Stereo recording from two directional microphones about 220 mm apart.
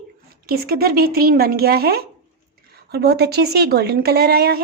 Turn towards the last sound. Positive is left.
turn(degrees=-45)  # may be behind; listen again after turning